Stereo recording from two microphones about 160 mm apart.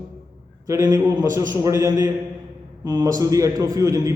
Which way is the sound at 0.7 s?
20° right (ahead or behind).